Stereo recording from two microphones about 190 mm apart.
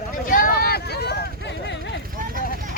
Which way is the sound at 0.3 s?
45° left (ahead or behind).